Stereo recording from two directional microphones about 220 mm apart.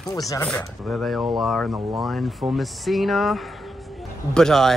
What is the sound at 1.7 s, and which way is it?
Speech, 15° right (ahead or behind).